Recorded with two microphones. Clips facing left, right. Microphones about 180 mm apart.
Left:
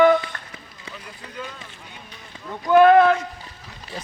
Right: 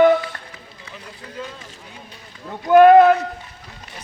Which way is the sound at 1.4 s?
30° right (ahead or behind).